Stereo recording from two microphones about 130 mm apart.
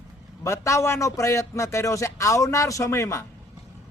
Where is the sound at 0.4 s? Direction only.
20° left (ahead or behind).